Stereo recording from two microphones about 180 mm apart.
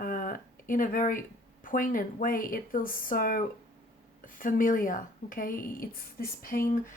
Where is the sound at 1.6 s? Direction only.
50° left (ahead or behind).